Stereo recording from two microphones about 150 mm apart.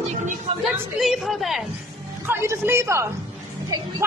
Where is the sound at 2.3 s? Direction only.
15° right (ahead or behind).